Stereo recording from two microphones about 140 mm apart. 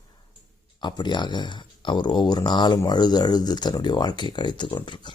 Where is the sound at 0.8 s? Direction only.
30° left (ahead or behind).